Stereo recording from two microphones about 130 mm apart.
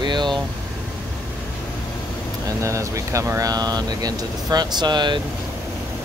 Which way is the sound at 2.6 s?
25° right (ahead or behind).